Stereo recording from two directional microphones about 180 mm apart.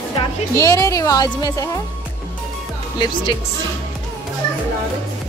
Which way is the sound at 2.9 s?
25° left (ahead or behind).